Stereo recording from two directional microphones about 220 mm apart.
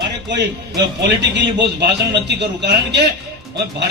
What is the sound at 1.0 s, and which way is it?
A man's voice, 50° right (ahead or behind).